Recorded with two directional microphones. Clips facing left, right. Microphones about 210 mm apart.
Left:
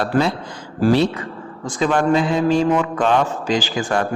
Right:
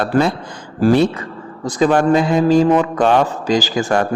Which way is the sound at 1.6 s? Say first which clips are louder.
Right 4 dB; 35° right (ahead or behind).